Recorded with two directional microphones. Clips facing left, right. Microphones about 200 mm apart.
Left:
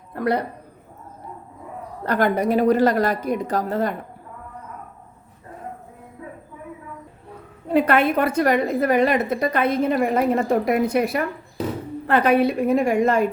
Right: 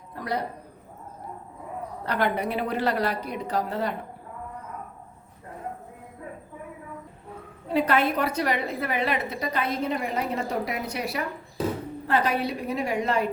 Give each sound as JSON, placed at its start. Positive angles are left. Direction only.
{"t": 0.1, "sound": "a sound", "side_deg": 60}
{"t": 2.0, "sound": "a woman's voice", "side_deg": 45}
{"t": 7.7, "sound": "a woman's voice", "side_deg": 55}